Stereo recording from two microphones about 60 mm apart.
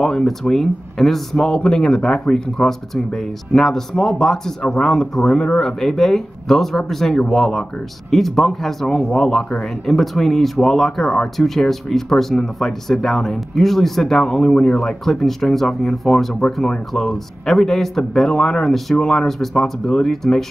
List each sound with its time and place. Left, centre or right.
0.0 s speech: centre